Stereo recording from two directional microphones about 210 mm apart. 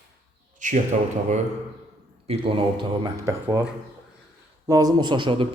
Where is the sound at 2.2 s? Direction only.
25° right (ahead or behind).